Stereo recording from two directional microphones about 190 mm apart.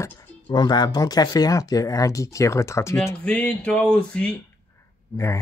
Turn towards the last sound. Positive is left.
turn(degrees=15)  # may be behind; listen again after turning